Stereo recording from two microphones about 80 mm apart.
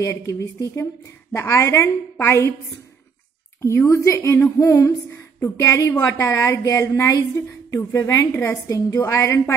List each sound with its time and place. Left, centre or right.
0.0 s a woman's voice: left
1.3 s a woman's voice: left
3.6 s a woman's voice: left